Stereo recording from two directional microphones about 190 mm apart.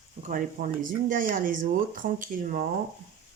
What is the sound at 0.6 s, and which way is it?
Speech, 40° right (ahead or behind).